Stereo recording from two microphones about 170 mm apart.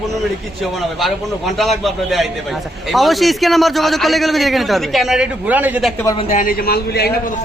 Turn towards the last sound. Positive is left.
turn(degrees=70)  # may be behind; listen again after turning